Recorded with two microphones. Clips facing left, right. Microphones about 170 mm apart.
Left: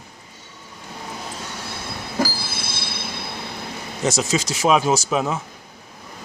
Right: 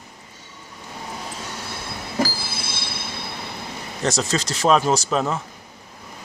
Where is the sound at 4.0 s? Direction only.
5° left (ahead or behind).